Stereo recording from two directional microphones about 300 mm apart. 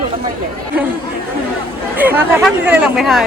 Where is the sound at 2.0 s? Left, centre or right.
Centre.